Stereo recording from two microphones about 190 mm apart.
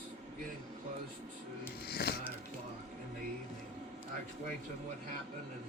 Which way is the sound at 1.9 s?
55° left (ahead or behind).